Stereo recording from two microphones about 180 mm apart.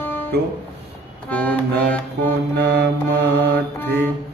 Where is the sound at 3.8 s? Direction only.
10° left (ahead or behind).